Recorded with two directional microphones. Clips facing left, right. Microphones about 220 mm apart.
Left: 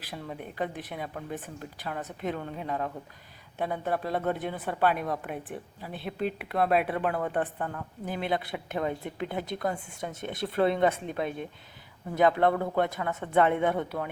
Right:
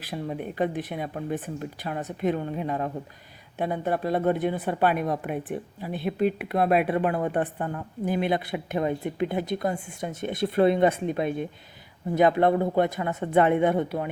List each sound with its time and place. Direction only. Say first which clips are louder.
0.0 s a woman's voice: right 7 dB; 20° right (ahead or behind)
12.1 s a woman's voice: right 3 dB; 15° right (ahead or behind)